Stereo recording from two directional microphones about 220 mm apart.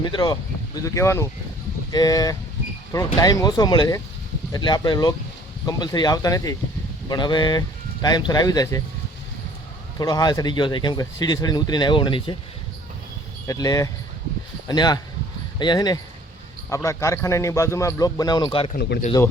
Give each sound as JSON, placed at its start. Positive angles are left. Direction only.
{"t": 0.0, "sound": "a man's voice", "side_deg": 20}
{"t": 10.0, "sound": "speech", "side_deg": 15}
{"t": 13.5, "sound": "a man's voice", "side_deg": 15}
{"t": 18.7, "sound": "speech", "side_deg": 50}